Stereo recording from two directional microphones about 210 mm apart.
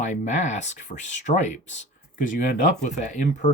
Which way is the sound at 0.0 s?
35° left (ahead or behind).